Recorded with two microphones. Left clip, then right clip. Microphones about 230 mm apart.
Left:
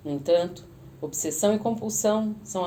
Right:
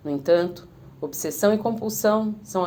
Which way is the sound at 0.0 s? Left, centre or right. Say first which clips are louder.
Right 3 dB; right.